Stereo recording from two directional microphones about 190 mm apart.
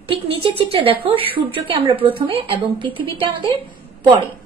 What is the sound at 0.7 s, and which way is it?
A woman's voice, 30° right (ahead or behind).